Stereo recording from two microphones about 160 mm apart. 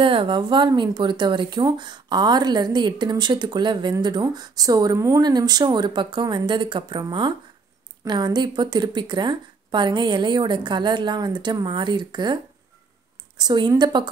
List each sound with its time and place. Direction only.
0.0 s speech: 35° right (ahead or behind)
13.4 s speech: 25° right (ahead or behind)